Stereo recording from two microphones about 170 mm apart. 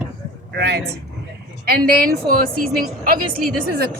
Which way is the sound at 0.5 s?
75° right (ahead or behind).